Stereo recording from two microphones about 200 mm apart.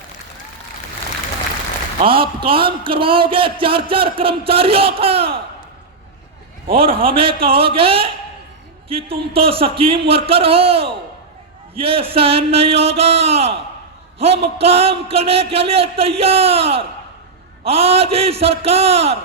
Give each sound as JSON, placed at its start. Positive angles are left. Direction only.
{"t": 2.0, "sound": "a man's voice", "side_deg": -25}
{"t": 6.7, "sound": "a man's voice", "side_deg": -30}